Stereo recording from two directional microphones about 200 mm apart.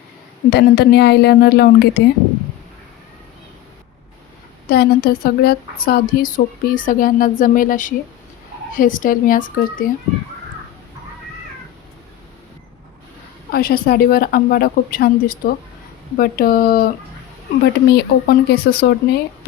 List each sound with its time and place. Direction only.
0.5 s a woman's voice: 55° left (ahead or behind)
4.6 s a woman's voice: 50° left (ahead or behind)
13.5 s a woman's voice: 50° left (ahead or behind)